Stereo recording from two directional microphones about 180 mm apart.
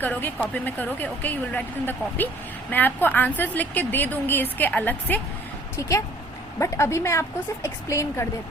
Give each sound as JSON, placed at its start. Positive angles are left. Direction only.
{"t": 0.0, "sound": "a woman's voice", "side_deg": 10}
{"t": 6.6, "sound": "a woman's voice", "side_deg": 15}